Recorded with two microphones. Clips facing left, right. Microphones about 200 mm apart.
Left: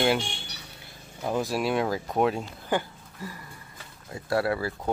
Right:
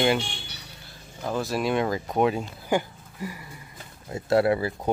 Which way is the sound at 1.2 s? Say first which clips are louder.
Even; 10° left (ahead or behind).